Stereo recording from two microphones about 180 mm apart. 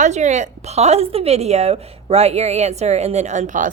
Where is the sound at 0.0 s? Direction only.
40° right (ahead or behind).